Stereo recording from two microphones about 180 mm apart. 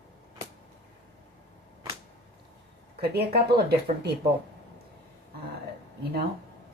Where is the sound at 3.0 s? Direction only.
60° right (ahead or behind).